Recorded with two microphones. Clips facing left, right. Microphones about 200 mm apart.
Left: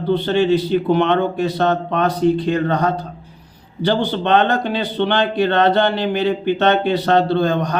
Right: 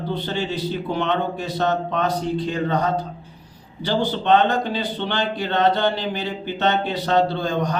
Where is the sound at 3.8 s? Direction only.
65° left (ahead or behind).